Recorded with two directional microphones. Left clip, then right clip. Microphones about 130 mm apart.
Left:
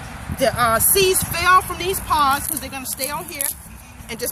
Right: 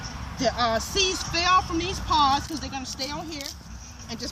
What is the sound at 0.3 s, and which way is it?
Speech, 25° left (ahead or behind).